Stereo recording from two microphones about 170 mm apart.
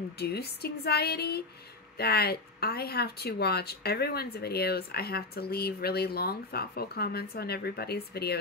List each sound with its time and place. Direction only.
0.2 s speech: 70° left (ahead or behind)